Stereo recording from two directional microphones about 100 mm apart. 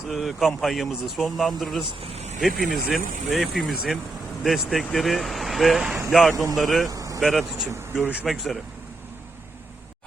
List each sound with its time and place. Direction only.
0.1 s speech: 5° right (ahead or behind)
1.8 s speech: 80° right
2.4 s speech: centre (ahead or behind)
6.9 s vehicle: 35° right (ahead or behind)
7.2 s speech: centre (ahead or behind)